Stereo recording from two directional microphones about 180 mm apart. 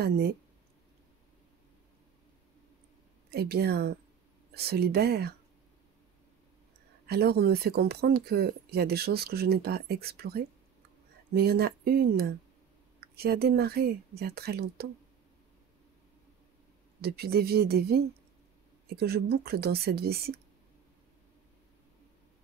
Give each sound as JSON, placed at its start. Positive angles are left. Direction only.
{"t": 3.3, "sound": "speech", "side_deg": -60}
{"t": 7.1, "sound": "speech", "side_deg": -60}
{"t": 17.0, "sound": "speech", "side_deg": -60}